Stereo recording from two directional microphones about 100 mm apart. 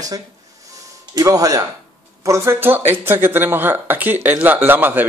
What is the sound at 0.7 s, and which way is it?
Music, 35° right (ahead or behind).